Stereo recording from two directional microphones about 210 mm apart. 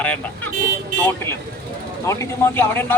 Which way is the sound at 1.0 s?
10° left (ahead or behind).